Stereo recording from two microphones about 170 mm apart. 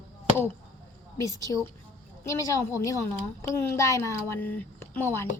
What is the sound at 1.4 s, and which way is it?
A woman's voice, 20° left (ahead or behind).